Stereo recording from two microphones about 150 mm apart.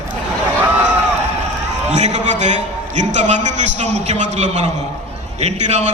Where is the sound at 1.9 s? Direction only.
50° right (ahead or behind).